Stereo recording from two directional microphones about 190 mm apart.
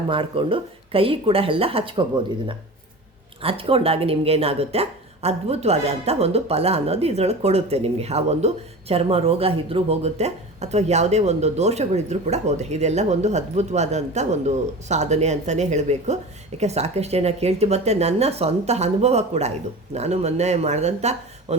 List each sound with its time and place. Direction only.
0.1 s speech: 25° right (ahead or behind)